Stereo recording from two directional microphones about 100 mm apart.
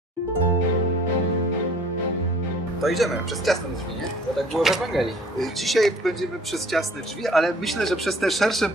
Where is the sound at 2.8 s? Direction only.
Centre (ahead or behind).